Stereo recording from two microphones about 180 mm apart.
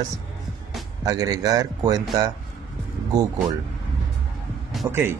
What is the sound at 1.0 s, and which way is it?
Speech, 20° right (ahead or behind).